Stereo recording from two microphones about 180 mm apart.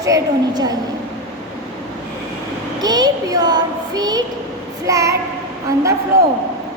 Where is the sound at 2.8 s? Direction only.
20° right (ahead or behind).